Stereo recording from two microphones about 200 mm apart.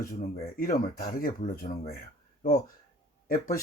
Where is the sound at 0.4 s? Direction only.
45° left (ahead or behind).